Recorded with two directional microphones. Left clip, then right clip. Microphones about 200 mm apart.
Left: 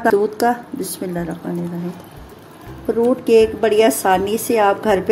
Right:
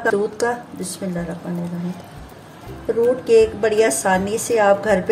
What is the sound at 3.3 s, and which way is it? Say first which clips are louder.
A woman's voice: left 2 dB; 40° left (ahead or behind).